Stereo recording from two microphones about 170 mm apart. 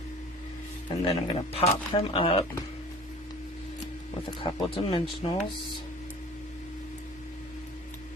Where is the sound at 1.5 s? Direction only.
35° left (ahead or behind).